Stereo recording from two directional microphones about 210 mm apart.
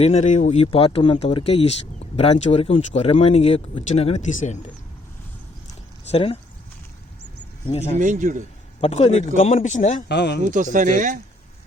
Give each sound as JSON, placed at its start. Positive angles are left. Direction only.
{"t": 0.0, "sound": "speech", "side_deg": 30}
{"t": 6.1, "sound": "speech", "side_deg": 30}
{"t": 7.7, "sound": "speech", "side_deg": 25}
{"t": 7.9, "sound": "speech", "side_deg": -35}
{"t": 8.8, "sound": "speech", "side_deg": 30}
{"t": 10.1, "sound": "a man's voice", "side_deg": 50}
{"t": 10.4, "sound": "speech", "side_deg": -35}